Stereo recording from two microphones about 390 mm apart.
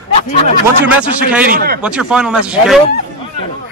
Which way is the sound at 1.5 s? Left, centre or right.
Right.